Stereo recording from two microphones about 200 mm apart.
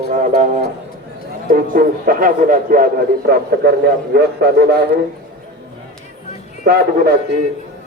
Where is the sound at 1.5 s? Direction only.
45° right (ahead or behind).